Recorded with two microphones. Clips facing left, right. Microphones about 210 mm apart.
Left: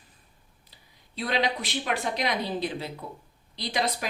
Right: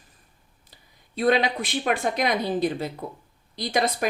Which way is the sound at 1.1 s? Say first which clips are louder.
Right 6 dB; 50° right (ahead or behind).